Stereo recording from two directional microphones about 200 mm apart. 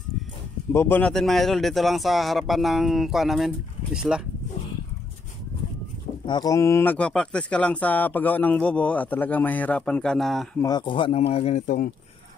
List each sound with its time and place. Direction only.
0.7 s speech: 10° left (ahead or behind)
6.2 s speech: 20° left (ahead or behind); by 10.5 s centre (ahead or behind)
10.6 s speech: 20° left (ahead or behind); by 11.9 s 40° left (ahead or behind)